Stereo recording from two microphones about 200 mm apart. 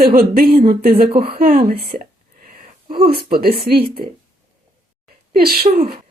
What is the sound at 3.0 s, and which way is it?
Speech, 50° right (ahead or behind).